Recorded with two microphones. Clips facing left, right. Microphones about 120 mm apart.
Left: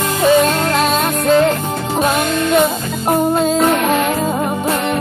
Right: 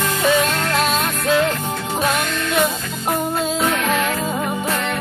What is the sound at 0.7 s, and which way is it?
Music, 40° left (ahead or behind).